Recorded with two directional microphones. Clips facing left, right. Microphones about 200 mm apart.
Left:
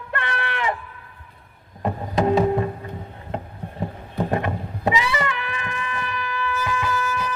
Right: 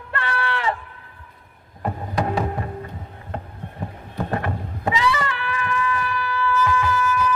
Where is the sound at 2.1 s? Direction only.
20° left (ahead or behind).